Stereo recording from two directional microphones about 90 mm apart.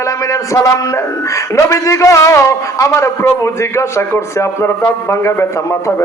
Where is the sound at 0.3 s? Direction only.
35° left (ahead or behind).